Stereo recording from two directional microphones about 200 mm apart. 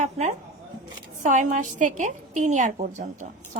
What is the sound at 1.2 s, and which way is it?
A woman's voice, 40° right (ahead or behind).